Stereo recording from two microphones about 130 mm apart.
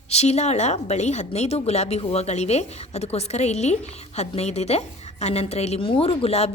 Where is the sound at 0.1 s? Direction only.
55° left (ahead or behind).